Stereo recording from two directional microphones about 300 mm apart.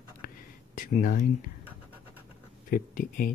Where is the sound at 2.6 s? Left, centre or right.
Left.